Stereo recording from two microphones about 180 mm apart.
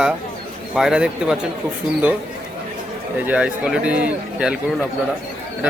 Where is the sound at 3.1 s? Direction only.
10° right (ahead or behind).